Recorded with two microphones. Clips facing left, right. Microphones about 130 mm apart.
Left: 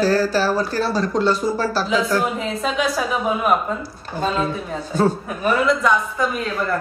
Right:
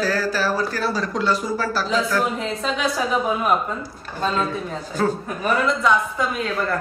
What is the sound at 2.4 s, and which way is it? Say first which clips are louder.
Speech: left 2 dB; 5° left (ahead or behind).